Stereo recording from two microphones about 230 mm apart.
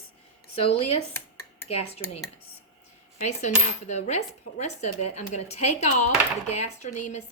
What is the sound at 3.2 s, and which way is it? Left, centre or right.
Speech, left.